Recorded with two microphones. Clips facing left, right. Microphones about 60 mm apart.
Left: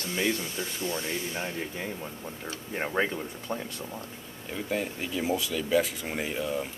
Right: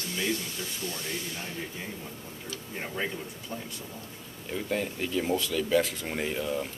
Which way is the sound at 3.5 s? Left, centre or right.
Left.